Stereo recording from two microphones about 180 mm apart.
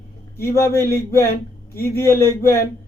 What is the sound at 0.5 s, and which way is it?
Speech, 15° left (ahead or behind).